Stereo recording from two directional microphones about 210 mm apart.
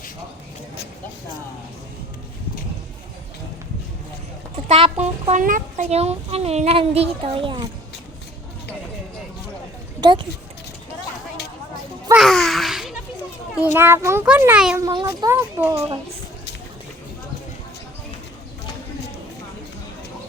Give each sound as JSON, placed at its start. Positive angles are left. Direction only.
{"t": 4.7, "sound": "a child's voice", "side_deg": -30}
{"t": 10.0, "sound": "speech", "side_deg": -20}
{"t": 12.1, "sound": "a sound", "side_deg": 0}
{"t": 13.7, "sound": "a child's voice", "side_deg": -10}
{"t": 14.8, "sound": "a child's voice", "side_deg": -20}